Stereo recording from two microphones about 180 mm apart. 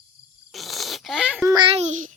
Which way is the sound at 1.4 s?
25° right (ahead or behind).